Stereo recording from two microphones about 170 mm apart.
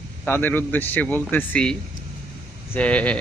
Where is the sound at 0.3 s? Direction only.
10° left (ahead or behind).